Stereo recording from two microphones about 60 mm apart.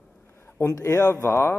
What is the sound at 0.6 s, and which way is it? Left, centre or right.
Speech, left.